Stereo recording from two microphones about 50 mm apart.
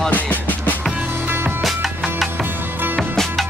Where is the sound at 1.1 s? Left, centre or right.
Right.